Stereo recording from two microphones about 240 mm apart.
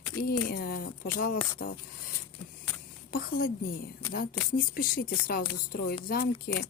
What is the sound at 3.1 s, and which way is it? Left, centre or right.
A woman's voice, left.